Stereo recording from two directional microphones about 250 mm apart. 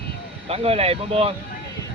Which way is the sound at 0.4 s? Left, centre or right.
Right.